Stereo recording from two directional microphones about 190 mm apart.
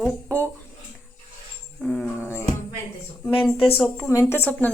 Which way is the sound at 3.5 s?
30° left (ahead or behind).